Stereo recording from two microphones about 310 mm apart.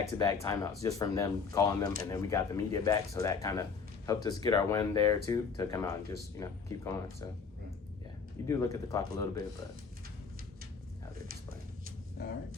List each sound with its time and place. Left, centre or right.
0.2 s speech: centre
8.4 s speech: centre
12.2 s speech: left